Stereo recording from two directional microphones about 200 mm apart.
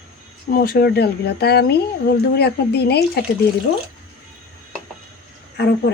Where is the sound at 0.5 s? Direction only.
50° left (ahead or behind).